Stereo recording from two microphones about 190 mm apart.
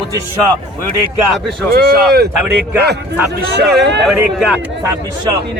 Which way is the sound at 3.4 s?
60° right (ahead or behind).